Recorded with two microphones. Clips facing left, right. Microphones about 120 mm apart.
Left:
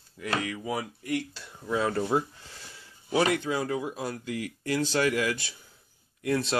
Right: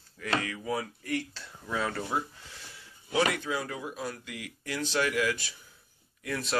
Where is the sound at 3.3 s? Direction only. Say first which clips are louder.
Left 5 dB; 30° left (ahead or behind).